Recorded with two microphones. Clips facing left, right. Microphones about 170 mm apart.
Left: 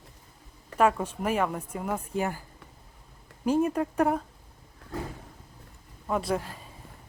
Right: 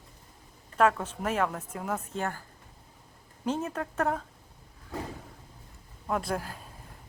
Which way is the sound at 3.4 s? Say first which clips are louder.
Left 7 dB; 10° left (ahead or behind).